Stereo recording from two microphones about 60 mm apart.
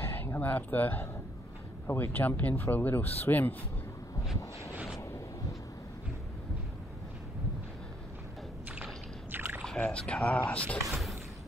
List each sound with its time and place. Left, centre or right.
0.0 s speech: left
9.3 s rowboat: right
9.8 s speech: centre
10.9 s a sound: centre